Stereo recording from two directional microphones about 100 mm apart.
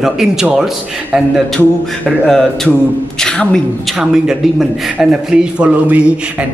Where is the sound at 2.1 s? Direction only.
5° left (ahead or behind).